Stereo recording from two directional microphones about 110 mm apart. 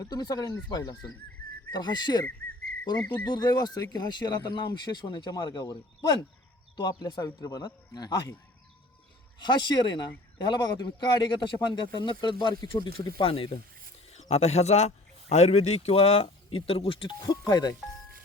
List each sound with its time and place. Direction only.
0.0 s speech: 35° left (ahead or behind)
3.2 s speech: 40° left (ahead or behind)
9.4 s speech: 45° left (ahead or behind)
14.1 s a man's voice: 85° left; by 17.7 s 35° left (ahead or behind)